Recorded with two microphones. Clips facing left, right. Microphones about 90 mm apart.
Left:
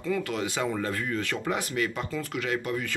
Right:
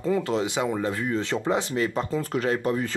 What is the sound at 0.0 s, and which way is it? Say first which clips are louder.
Speech: right 5 dB; 30° right (ahead or behind).